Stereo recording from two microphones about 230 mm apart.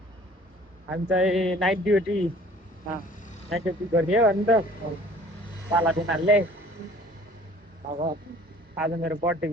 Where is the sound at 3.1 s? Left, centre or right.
Left.